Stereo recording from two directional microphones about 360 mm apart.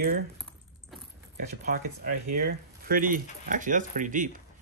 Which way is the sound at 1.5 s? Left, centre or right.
Right.